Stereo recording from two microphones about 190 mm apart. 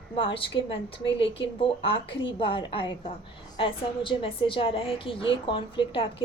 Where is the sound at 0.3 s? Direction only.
30° left (ahead or behind).